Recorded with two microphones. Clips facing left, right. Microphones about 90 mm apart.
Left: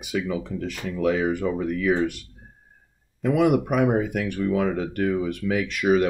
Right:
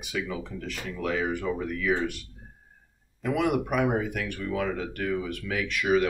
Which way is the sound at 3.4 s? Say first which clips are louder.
Left 5 dB; 15° left (ahead or behind).